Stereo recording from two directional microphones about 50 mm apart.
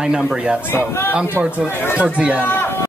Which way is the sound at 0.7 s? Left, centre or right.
Left.